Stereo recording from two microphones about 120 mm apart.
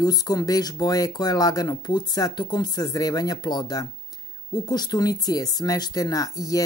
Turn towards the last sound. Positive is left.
turn(degrees=30)  # may be behind; listen again after turning